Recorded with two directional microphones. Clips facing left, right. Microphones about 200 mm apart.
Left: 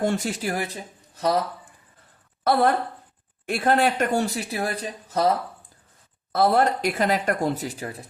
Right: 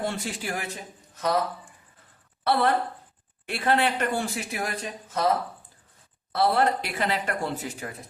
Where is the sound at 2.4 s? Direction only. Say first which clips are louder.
Left 3 dB; 45° left (ahead or behind).